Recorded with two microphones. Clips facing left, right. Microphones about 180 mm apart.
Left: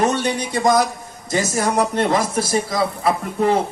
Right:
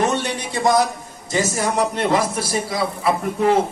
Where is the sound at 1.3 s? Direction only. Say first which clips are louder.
Left 1 dB; 45° left (ahead or behind).